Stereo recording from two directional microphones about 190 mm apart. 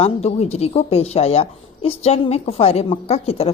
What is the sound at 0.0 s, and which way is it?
Speech, 30° left (ahead or behind).